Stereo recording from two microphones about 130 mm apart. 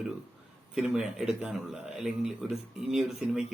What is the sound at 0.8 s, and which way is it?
Speech, 5° right (ahead or behind).